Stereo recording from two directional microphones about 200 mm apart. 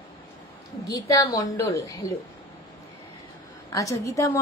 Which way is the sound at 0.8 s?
15° left (ahead or behind).